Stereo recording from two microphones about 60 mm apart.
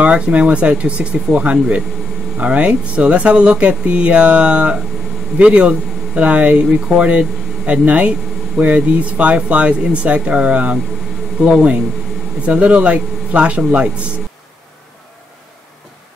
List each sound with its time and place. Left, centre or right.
0.0 s speech: right